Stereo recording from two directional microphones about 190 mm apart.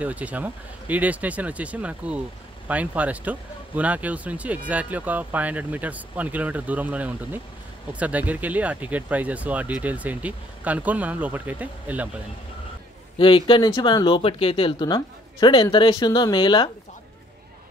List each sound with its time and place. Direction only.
0.0 s speech: 5° right (ahead or behind)
13.2 s a woman's voice: 25° left (ahead or behind)